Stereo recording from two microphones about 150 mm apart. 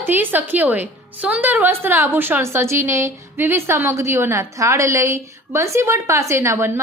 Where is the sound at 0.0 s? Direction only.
15° right (ahead or behind).